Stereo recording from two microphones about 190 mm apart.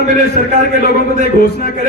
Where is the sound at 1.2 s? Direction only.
55° left (ahead or behind).